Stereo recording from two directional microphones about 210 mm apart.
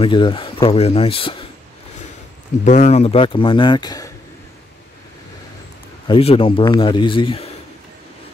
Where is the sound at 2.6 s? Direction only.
35° left (ahead or behind); by 4.1 s 20° left (ahead or behind).